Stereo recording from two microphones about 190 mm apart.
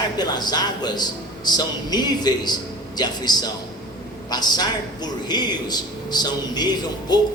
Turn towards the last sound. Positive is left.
turn(degrees=20)  # may be behind; listen again after turning